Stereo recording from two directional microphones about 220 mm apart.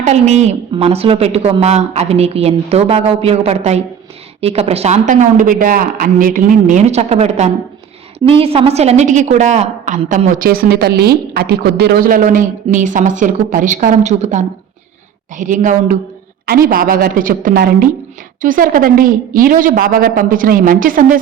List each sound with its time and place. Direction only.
0.0 s a woman's voice: 30° right (ahead or behind)